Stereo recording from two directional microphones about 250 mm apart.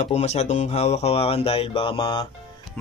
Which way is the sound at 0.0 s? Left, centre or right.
Left.